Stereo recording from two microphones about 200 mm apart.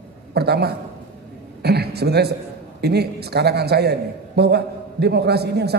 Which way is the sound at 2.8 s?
55° right (ahead or behind).